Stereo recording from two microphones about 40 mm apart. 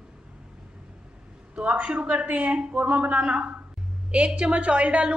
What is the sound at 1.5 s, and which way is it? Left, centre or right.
A woman's voice, right.